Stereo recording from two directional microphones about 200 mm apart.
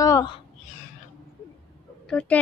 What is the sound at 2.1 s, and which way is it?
Speech, 5° left (ahead or behind).